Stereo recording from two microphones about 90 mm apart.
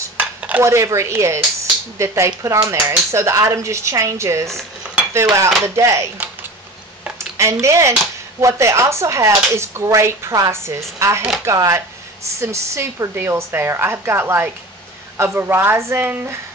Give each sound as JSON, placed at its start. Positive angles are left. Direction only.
{"t": 0.4, "sound": "dishes", "side_deg": -20}
{"t": 0.7, "sound": "speech", "side_deg": -35}
{"t": 7.2, "sound": "a sound", "side_deg": -35}
{"t": 7.6, "sound": "a woman's voice", "side_deg": -35}